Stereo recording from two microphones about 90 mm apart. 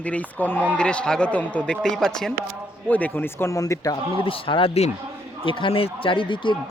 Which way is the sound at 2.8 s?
20° left (ahead or behind).